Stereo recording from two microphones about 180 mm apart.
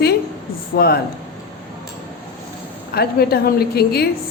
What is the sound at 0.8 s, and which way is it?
Speech, 55° left (ahead or behind).